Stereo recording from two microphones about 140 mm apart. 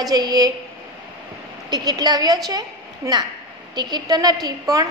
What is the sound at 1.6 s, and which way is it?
A woman's voice, 30° right (ahead or behind).